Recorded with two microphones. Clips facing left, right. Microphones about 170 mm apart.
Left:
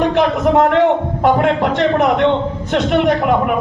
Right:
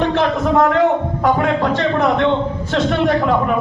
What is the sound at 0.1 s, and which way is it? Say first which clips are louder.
A man's voice: left 2 dB; 15° left (ahead or behind).